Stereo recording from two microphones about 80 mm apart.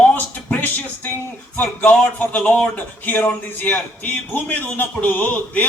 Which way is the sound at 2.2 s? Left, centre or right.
Centre.